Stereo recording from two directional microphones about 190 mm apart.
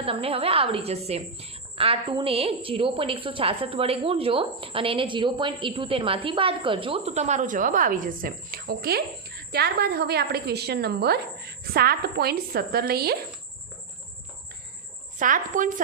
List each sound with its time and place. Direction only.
0.0 s a woman's voice: 30° right (ahead or behind); by 13.1 s 55° right (ahead or behind)
15.2 s a woman's voice: 45° right (ahead or behind)